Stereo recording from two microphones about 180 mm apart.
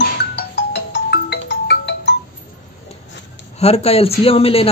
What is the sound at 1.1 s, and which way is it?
Music, 70° left (ahead or behind).